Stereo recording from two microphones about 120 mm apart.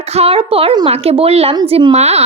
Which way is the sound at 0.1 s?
55° right (ahead or behind).